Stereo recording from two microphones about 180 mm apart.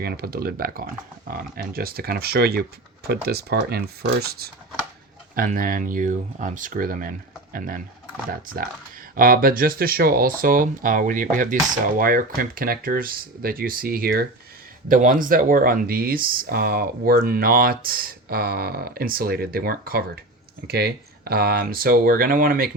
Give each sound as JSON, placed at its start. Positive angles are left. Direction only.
{"t": 0.0, "sound": "speech", "side_deg": -60}
{"t": 5.3, "sound": "speech", "side_deg": -50}
{"t": 9.1, "sound": "speech", "side_deg": -55}